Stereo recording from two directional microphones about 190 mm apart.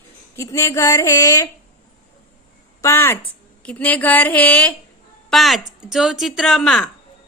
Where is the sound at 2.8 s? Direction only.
15° left (ahead or behind).